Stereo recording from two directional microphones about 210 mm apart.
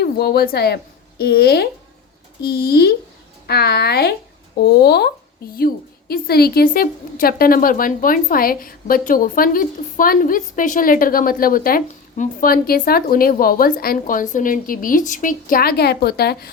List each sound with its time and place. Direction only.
0.0 s a woman's voice: 45° left (ahead or behind)